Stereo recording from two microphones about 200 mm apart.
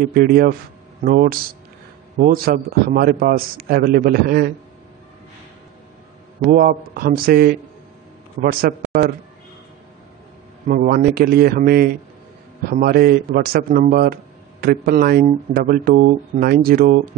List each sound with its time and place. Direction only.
0.1 s a man's voice: 50° right (ahead or behind)
6.5 s a man's voice: 45° right (ahead or behind)
10.7 s a man's voice: 45° right (ahead or behind)